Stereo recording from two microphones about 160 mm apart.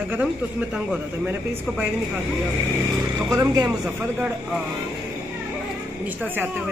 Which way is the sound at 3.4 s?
25° right (ahead or behind).